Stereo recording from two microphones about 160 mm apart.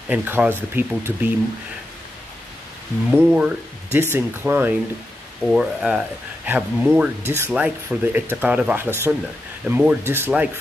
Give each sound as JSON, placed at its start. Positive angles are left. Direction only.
{"t": 0.1, "sound": "speech", "side_deg": -10}
{"t": 3.1, "sound": "speech", "side_deg": -5}